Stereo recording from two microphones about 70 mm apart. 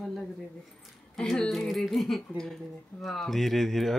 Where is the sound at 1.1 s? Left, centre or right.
Centre.